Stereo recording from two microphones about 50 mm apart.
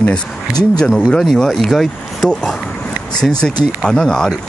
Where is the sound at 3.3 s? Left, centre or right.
Centre.